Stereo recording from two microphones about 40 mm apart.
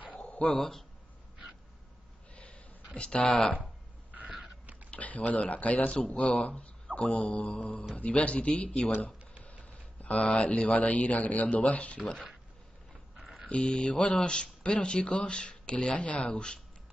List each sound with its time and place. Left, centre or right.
0.2 s dog: left
0.5 s speech: centre
2.3 s snort: left
3.2 s speech: left
4.9 s speech: left
9.7 s speech: left
13.5 s speech: left